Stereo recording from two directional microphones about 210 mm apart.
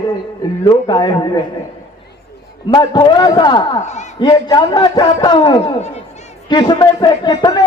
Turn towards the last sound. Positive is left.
turn(degrees=20)  # may be behind; listen again after turning